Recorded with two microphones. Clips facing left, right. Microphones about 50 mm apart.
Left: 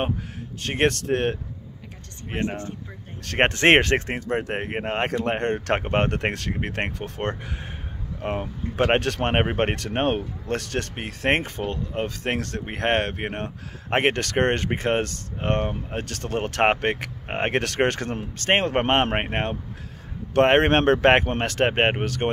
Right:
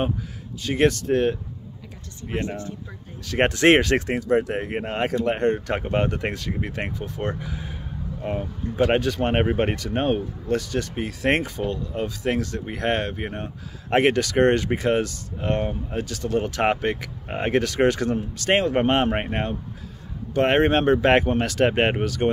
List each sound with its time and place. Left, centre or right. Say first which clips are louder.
0.6 s speech: right 2 dB; left
2.2 s speech: even; left
9.3 s speech: even; left
13.8 s speech: right 3 dB; left
21.1 s speech: right 1 dB; left